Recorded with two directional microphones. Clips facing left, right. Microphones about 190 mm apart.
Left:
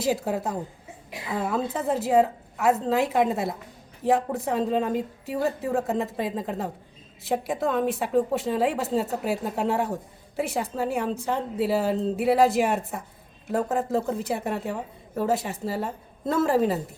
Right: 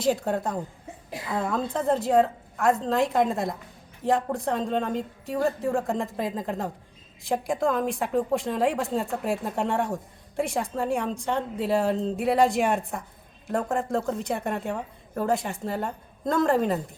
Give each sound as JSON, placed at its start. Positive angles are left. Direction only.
{"t": 0.0, "sound": "a woman's voice", "side_deg": 5}